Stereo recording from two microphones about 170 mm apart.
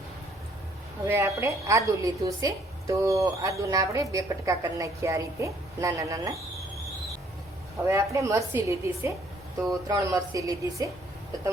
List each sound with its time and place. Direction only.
1.0 s a woman's voice: 15° right (ahead or behind)
7.9 s a woman's voice: 15° right (ahead or behind)